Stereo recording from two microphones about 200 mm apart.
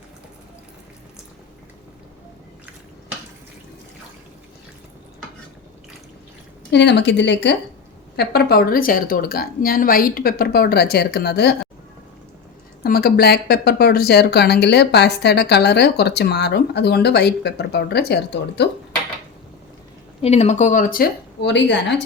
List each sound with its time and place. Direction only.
6.7 s a woman's voice: 60° left (ahead or behind)
12.8 s speech: 50° left (ahead or behind)
20.2 s a woman's voice: 35° left (ahead or behind); by 21.9 s 60° left (ahead or behind)